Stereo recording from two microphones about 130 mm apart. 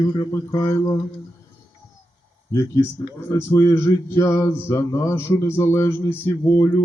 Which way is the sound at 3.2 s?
20° left (ahead or behind).